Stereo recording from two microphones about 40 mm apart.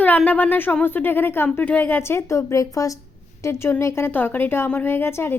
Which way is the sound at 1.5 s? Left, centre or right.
Left.